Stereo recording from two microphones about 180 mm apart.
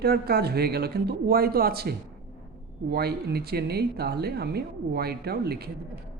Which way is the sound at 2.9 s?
60° right (ahead or behind).